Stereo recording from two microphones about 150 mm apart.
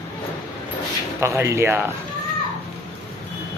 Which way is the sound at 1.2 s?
20° right (ahead or behind).